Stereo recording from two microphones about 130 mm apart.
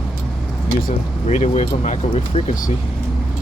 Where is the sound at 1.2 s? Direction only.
65° left (ahead or behind).